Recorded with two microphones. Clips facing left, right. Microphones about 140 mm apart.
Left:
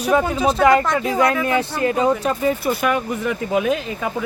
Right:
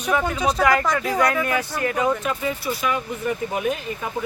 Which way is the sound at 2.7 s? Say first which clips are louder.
Left 5 dB; 60° left (ahead or behind).